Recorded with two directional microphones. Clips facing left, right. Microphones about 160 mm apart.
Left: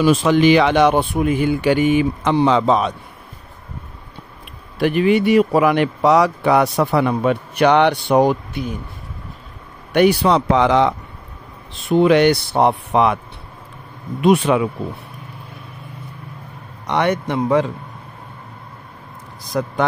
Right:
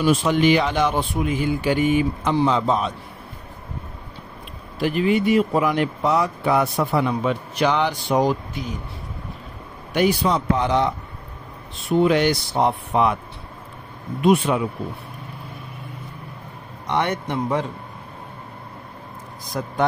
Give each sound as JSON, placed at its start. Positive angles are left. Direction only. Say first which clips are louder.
{"t": 0.0, "sound": "speech", "louder": "left 4 dB", "side_deg": 90}
{"t": 4.7, "sound": "speech", "louder": "left 4 dB", "side_deg": 65}
{"t": 9.9, "sound": "speech", "louder": "left 5 dB", "side_deg": 70}
{"t": 11.9, "sound": "speech", "louder": "left 5 dB", "side_deg": 75}
{"t": 14.2, "sound": "a man's voice", "louder": "left 3 dB", "side_deg": 90}
{"t": 16.9, "sound": "a man's voice", "louder": "left 4 dB", "side_deg": 90}
{"t": 19.6, "sound": "a man's voice", "louder": "left 6 dB", "side_deg": 90}